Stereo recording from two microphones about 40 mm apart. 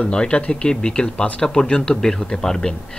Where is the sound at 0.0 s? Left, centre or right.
Left.